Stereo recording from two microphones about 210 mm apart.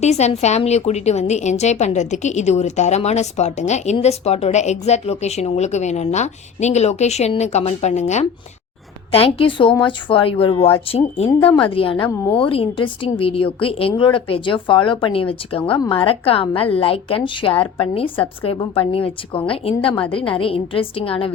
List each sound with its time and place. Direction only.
0.0 s a woman's voice: 30° left (ahead or behind)
12.0 s a woman's voice: 10° left (ahead or behind)
12.4 s a woman's voice: 25° left (ahead or behind)